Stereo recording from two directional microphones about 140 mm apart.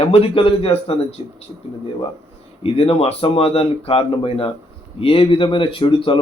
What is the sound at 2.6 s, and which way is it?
A man's voice, 45° left (ahead or behind).